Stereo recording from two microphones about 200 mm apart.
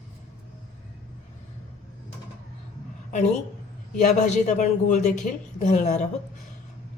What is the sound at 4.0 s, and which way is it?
A woman's voice, 35° left (ahead or behind).